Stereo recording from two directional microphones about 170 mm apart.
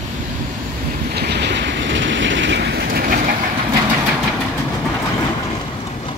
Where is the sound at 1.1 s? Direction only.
75° right (ahead or behind); by 3.3 s 60° right (ahead or behind).